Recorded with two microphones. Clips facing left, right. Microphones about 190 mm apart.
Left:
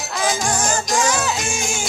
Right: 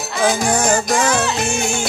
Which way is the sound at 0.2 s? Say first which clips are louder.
Right 5 dB; 60° right (ahead or behind).